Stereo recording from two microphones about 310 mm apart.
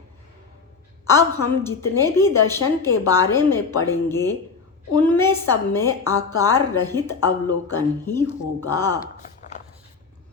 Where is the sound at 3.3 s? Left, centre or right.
Centre.